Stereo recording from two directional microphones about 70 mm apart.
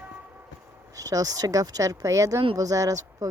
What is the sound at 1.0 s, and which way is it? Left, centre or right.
Speech, right.